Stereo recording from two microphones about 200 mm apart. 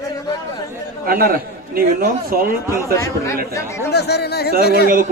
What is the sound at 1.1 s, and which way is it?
A man's voice, 45° right (ahead or behind).